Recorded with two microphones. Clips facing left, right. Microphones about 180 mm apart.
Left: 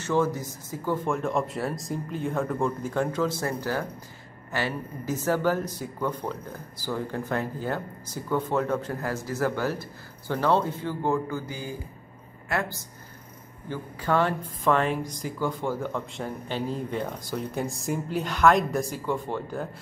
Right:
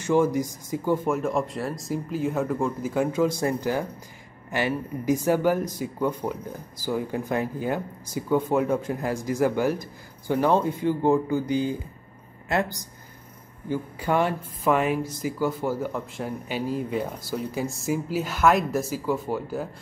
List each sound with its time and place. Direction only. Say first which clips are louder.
0.0 s speech: right 4 dB; 15° right (ahead or behind)